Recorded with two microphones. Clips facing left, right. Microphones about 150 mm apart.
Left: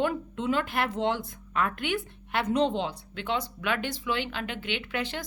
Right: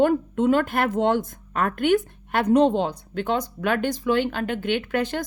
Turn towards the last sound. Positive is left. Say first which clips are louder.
# right 8 dB
turn(degrees=-45)  # may be behind; listen again after turning